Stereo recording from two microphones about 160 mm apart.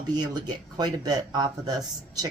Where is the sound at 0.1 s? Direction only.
25° right (ahead or behind).